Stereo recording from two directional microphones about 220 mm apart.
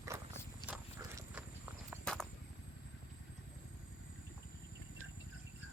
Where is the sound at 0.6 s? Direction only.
5° right (ahead or behind).